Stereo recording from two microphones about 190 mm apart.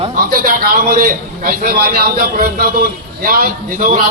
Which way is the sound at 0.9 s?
50° right (ahead or behind).